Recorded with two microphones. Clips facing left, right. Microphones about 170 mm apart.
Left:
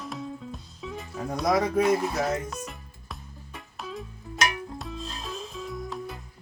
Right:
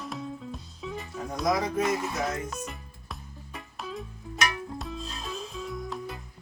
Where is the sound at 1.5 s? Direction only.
60° left (ahead or behind).